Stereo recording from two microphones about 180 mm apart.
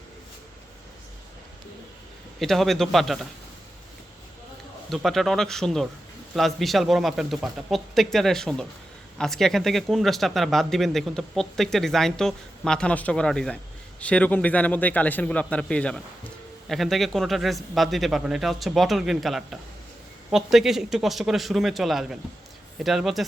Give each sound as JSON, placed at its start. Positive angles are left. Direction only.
{"t": 2.4, "sound": "speech", "side_deg": 0}
{"t": 4.9, "sound": "a man's voice", "side_deg": 0}